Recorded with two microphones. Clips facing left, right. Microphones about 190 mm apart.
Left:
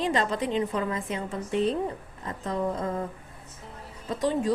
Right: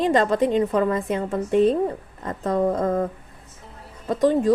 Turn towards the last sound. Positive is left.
turn(degrees=-50)  # may be behind; listen again after turning